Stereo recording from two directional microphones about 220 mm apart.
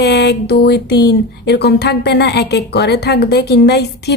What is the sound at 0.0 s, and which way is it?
Speech, 50° left (ahead or behind).